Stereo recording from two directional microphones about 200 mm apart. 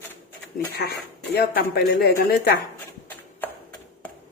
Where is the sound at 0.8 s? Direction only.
55° left (ahead or behind).